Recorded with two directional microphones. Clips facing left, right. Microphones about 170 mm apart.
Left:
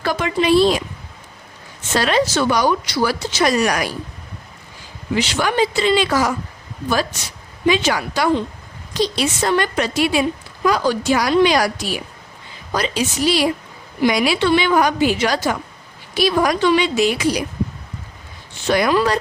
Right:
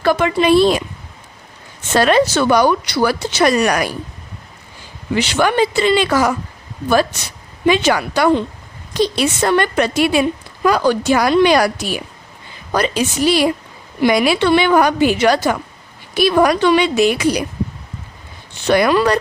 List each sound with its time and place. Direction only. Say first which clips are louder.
0.0 s speech: right 5 dB; 60° right (ahead or behind)
1.9 s speech: right 4 dB; 55° right (ahead or behind)
5.1 s speech: right 3 dB; 60° right (ahead or behind)
7.7 s a woman's voice: right 3 dB; 60° right (ahead or behind)
18.6 s speech: right 3 dB; 65° right (ahead or behind)